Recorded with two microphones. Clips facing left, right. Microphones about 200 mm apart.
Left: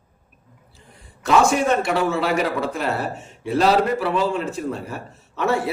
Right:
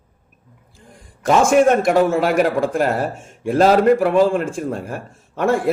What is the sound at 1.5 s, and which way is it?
A man's voice, 50° right (ahead or behind).